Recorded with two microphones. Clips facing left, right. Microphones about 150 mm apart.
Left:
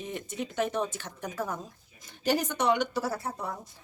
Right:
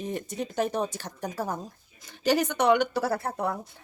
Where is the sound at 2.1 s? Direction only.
85° right; by 3.8 s 60° right (ahead or behind).